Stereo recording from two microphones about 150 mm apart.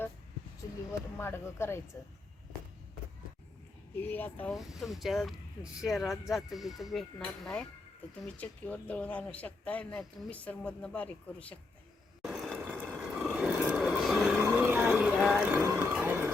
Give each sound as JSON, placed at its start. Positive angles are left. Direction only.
{"t": 1.2, "sound": "speech", "side_deg": 15}
{"t": 3.9, "sound": "speech", "side_deg": 15}
{"t": 4.5, "sound": "speech", "side_deg": 0}
{"t": 12.2, "sound": "mechanisms", "side_deg": 0}
{"t": 12.9, "sound": "a sound", "side_deg": 0}